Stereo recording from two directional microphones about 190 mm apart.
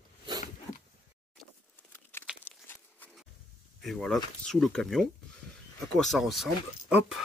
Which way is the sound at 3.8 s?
Centre (ahead or behind).